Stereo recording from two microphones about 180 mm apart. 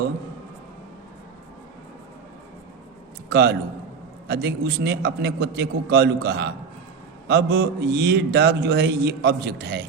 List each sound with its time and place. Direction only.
3.2 s a man's voice: 65° right (ahead or behind)